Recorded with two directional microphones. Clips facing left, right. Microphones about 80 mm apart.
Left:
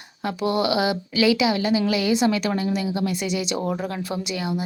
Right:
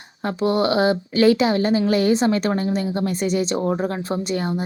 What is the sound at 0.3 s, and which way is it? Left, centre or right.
A woman's voice, right.